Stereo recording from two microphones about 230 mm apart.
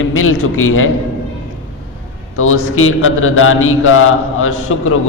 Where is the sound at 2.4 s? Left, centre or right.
Left.